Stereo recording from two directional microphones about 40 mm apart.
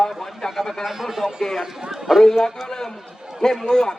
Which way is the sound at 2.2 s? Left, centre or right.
Centre.